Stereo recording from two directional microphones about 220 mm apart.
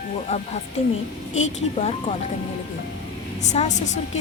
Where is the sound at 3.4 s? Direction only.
30° left (ahead or behind).